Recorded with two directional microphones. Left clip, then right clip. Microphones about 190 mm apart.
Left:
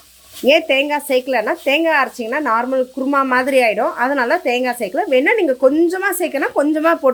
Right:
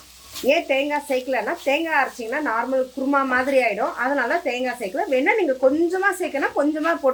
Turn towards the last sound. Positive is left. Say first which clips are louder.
# left 6 dB
turn(degrees=55)  # may be behind; listen again after turning